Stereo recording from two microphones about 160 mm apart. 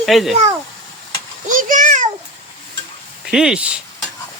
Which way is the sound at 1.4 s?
55° right (ahead or behind).